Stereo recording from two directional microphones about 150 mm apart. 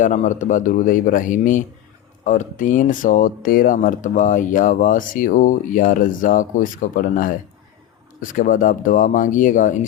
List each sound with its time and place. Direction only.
0.0 s speech: 55° left (ahead or behind)